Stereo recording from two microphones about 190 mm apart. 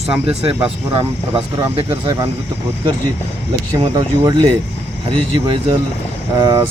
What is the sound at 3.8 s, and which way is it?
Speech, 20° right (ahead or behind).